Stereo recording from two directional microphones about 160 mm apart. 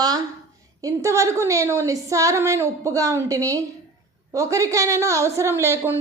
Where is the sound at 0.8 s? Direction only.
20° right (ahead or behind).